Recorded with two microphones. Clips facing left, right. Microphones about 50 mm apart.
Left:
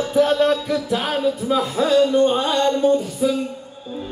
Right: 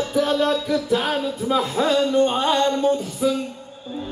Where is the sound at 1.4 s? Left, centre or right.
Centre.